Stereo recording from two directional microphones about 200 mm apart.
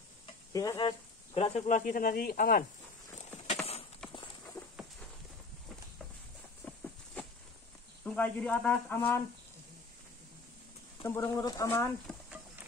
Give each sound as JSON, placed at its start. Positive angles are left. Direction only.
{"t": 0.5, "sound": "speech", "side_deg": 15}
{"t": 4.0, "sound": "clip-clop", "side_deg": 5}
{"t": 6.6, "sound": "a sound", "side_deg": 5}
{"t": 8.0, "sound": "speech", "side_deg": 5}
{"t": 11.1, "sound": "speech", "side_deg": 15}
{"t": 12.1, "sound": "stir", "side_deg": -5}